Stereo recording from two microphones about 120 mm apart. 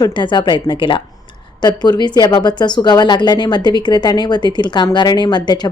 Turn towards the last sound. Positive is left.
turn(degrees=35)  # may be behind; listen again after turning